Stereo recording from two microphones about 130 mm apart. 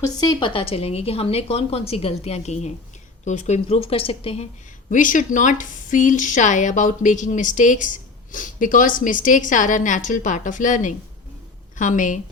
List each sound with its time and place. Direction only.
0.2 s a woman's voice: 35° left (ahead or behind)
4.9 s a woman's voice: 85° left